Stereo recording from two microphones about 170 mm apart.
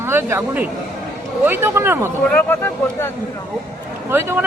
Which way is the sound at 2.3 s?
10° left (ahead or behind).